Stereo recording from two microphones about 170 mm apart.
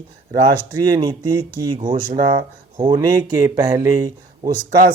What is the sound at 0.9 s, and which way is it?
Speech, 25° right (ahead or behind).